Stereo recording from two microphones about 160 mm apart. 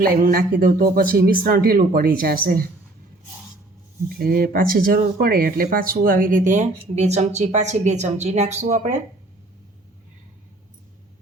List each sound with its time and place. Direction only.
0.0 s speech: 70° right (ahead or behind)
4.2 s speech: 65° right (ahead or behind); by 9.0 s 45° right (ahead or behind)